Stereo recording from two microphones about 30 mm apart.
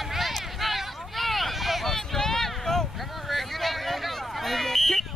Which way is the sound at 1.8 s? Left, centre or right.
Centre.